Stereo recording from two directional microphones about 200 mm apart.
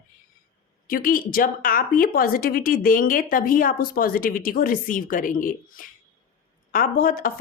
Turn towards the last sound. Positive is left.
turn(degrees=45)  # may be behind; listen again after turning